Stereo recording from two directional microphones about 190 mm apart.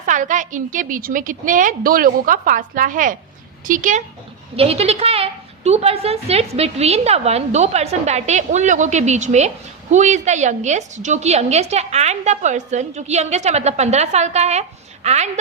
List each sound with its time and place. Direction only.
0.0 s a woman's voice: 40° right (ahead or behind)
4.5 s a woman's voice: 30° right (ahead or behind)